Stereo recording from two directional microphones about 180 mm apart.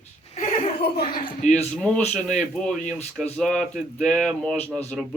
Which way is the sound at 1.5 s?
5° left (ahead or behind).